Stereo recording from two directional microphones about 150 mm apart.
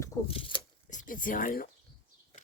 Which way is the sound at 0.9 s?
60° left (ahead or behind).